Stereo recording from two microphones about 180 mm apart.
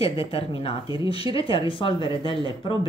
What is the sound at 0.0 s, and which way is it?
Speech, 30° left (ahead or behind).